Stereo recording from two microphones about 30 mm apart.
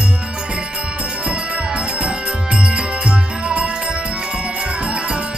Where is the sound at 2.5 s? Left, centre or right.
Right.